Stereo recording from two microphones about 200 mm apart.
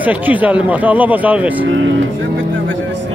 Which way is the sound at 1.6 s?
70° right (ahead or behind).